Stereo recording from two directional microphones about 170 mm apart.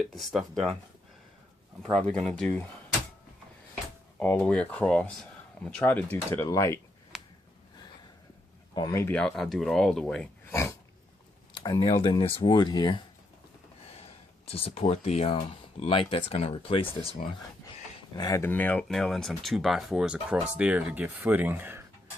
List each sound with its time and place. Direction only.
0.0 s speech: centre (ahead or behind)
1.8 s speech: 5° left (ahead or behind)
4.2 s speech: 10° left (ahead or behind)
7.1 s a sound: centre (ahead or behind)
8.7 s speech: 25° left (ahead or behind)
9.0 s speech: 5° left (ahead or behind)
10.5 s dog: 15° left (ahead or behind)
11.5 s speech: 25° left (ahead or behind)
14.4 s speech: 35° left (ahead or behind)
18.2 s speech: 20° left (ahead or behind); by 21.8 s 10° right (ahead or behind)